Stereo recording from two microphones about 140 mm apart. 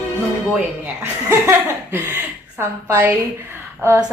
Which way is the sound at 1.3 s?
20° right (ahead or behind).